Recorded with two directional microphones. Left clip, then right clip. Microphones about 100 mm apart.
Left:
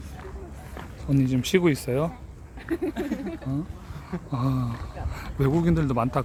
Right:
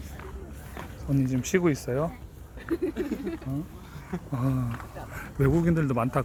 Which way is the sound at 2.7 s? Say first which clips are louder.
Left 1 dB; 40° left (ahead or behind).